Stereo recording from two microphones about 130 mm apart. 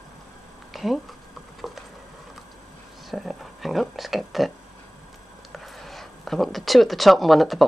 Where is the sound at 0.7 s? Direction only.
Centre (ahead or behind).